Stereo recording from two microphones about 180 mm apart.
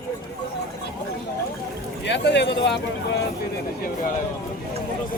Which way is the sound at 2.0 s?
75° left (ahead or behind).